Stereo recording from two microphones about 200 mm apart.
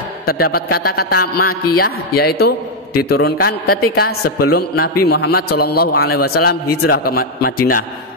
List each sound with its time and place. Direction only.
0.3 s a man's voice: 50° left (ahead or behind)